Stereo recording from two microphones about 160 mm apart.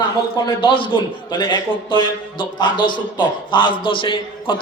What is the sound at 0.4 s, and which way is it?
A man's voice, 30° left (ahead or behind).